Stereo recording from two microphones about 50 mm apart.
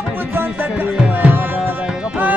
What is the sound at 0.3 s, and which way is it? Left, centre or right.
Music, right.